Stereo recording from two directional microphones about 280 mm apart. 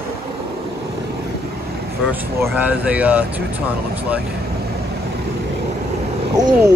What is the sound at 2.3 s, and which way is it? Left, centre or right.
Speech, centre.